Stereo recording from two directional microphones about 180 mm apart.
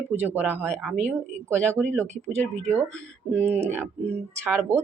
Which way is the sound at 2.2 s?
15° right (ahead or behind).